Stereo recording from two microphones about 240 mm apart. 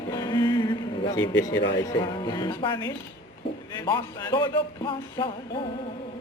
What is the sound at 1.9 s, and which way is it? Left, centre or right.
Speech, centre.